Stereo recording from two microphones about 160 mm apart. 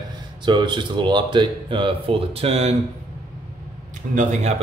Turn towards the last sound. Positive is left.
turn(degrees=-50)  # may be behind; listen again after turning